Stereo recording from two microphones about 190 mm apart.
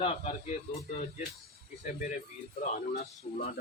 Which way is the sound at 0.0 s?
30° left (ahead or behind).